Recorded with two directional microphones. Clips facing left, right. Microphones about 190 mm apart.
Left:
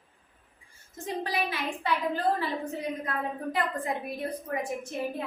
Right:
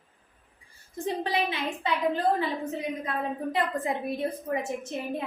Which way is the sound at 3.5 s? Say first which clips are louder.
Right 2 dB; 25° right (ahead or behind).